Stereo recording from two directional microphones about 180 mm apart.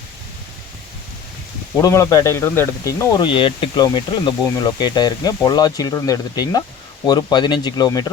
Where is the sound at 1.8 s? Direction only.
15° left (ahead or behind).